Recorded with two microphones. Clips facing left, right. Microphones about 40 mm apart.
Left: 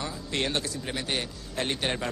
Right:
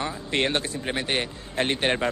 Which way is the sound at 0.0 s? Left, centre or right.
Right.